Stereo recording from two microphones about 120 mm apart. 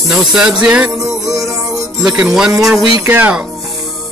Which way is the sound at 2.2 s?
5° right (ahead or behind).